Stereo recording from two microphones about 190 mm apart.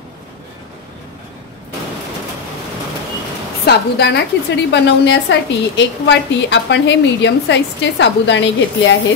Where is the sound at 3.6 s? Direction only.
60° left (ahead or behind).